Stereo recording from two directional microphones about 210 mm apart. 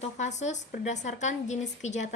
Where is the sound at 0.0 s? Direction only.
35° left (ahead or behind).